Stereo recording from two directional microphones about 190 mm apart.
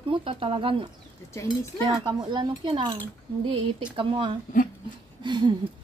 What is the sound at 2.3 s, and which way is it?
Speech, 25° right (ahead or behind).